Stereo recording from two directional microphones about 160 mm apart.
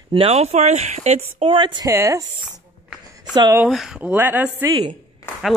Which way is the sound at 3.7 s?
5° right (ahead or behind).